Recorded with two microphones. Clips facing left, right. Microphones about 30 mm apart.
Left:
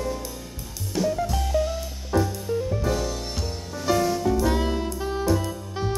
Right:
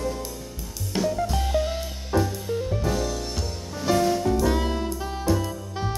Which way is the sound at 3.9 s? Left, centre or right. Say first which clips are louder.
Right 1 dB; centre.